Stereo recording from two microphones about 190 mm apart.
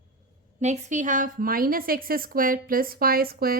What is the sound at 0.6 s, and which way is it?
A woman's voice, 40° right (ahead or behind).